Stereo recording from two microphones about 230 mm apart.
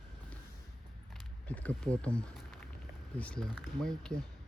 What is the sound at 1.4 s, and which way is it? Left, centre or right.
Speech, centre.